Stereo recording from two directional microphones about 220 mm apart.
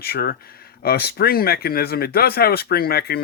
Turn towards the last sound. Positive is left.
turn(degrees=45)  # may be behind; listen again after turning